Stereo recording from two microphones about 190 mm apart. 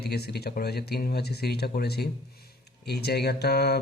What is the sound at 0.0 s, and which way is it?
Speech, 55° left (ahead or behind).